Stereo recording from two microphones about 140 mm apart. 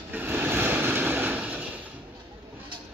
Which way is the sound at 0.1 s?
15° right (ahead or behind).